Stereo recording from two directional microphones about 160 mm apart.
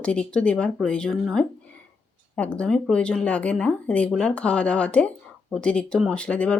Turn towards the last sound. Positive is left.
turn(degrees=5)  # may be behind; listen again after turning